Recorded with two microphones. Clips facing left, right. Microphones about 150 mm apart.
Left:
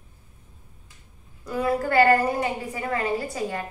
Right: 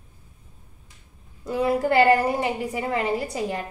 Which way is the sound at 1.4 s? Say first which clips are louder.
Right 2 dB; 25° right (ahead or behind).